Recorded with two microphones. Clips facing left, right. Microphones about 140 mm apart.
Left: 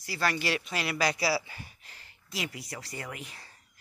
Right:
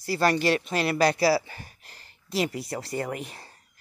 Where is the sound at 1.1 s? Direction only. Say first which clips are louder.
Right 7 dB; 50° right (ahead or behind).